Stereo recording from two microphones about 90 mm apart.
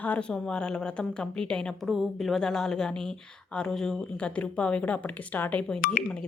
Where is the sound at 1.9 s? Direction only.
Centre (ahead or behind).